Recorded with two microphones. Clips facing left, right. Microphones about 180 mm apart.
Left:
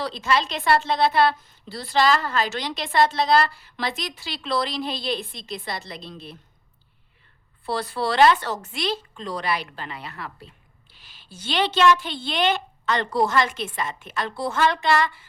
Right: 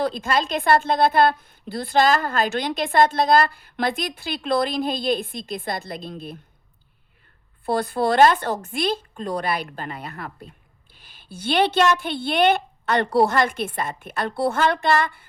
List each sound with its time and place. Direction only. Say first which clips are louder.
0.0 s a woman's voice: right 2 dB; 50° right (ahead or behind)
7.6 s a woman's voice: right 4 dB; 55° right (ahead or behind)